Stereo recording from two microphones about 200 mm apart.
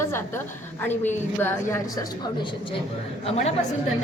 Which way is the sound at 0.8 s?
10° left (ahead or behind).